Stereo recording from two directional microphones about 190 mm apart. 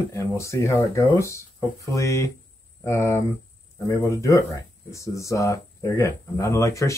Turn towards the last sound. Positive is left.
turn(degrees=15)  # may be behind; listen again after turning